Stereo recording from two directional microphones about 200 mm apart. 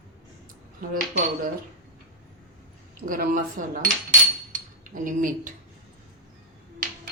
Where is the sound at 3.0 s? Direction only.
45° right (ahead or behind).